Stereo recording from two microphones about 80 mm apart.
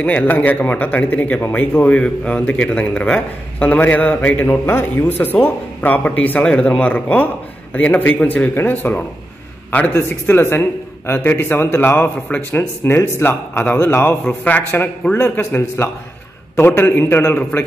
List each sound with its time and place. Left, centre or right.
0.0 s a man's voice: left